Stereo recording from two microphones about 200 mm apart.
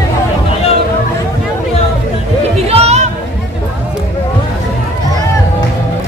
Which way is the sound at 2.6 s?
30° right (ahead or behind).